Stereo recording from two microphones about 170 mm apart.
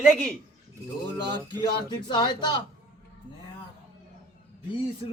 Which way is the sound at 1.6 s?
25° left (ahead or behind).